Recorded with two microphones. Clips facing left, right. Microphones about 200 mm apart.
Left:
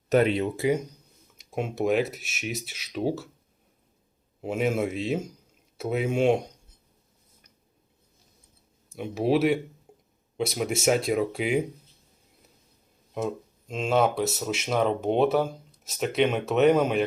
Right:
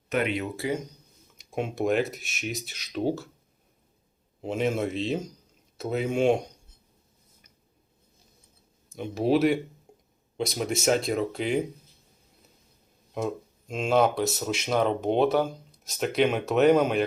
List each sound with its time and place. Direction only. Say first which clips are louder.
0.1 s speech: left 5 dB; 35° left (ahead or behind)
1.4 s speech: even; 5° left (ahead or behind)
4.4 s speech: left 1 dB; 5° left (ahead or behind)
8.9 s speech: even; 5° left (ahead or behind)
9.9 s a sound: left 1 dB; 5° left (ahead or behind)
10.3 s speech: left 1 dB; 5° left (ahead or behind)
13.1 s speech: even; centre (ahead or behind)